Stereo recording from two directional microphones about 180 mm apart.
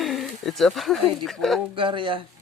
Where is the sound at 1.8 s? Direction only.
30° right (ahead or behind).